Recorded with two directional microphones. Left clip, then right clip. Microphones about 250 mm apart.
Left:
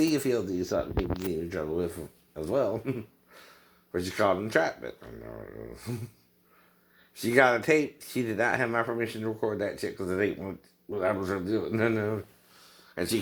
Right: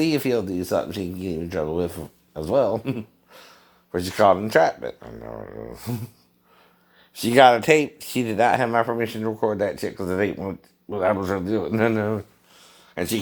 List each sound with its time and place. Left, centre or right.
0.0 s speech: right
7.1 s speech: right